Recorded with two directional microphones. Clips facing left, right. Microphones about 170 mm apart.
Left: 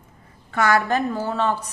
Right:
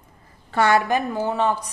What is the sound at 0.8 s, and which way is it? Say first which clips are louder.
Speech: even; 15° right (ahead or behind).